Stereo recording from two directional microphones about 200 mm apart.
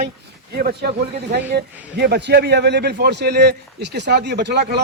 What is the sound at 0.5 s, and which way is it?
A man's voice, 55° right (ahead or behind).